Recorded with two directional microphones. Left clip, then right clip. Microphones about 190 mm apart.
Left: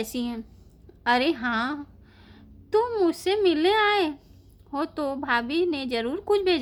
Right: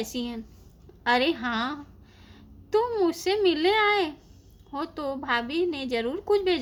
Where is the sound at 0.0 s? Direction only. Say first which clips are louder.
Left 2 dB; 25° left (ahead or behind).